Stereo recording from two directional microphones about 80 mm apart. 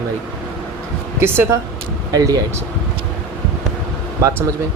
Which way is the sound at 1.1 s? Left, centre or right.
Right.